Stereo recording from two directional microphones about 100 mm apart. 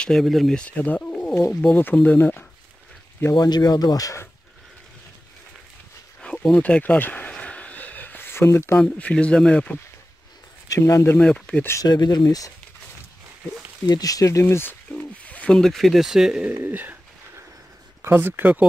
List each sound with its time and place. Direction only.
0.0 s speech: 5° left (ahead or behind); by 2.4 s 20° left (ahead or behind)
3.3 s speech: 45° left (ahead or behind)
6.2 s a sound: 10° left (ahead or behind); by 8.8 s 25° left (ahead or behind)
8.8 s speech: 10° left (ahead or behind)
10.7 s speech: 30° left (ahead or behind)
11.1 s speech: 10° left (ahead or behind)
11.8 s speech: 45° left (ahead or behind)
13.8 s speech: 40° left (ahead or behind)
15.0 s speech: 15° left (ahead or behind); by 16.5 s 5° right (ahead or behind)
16.5 s speech: 20° right (ahead or behind)
18.0 s speech: 20° right (ahead or behind)